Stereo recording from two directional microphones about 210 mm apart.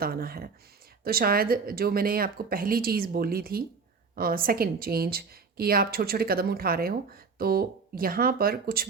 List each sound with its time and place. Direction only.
0.0 s a woman's voice: 45° right (ahead or behind)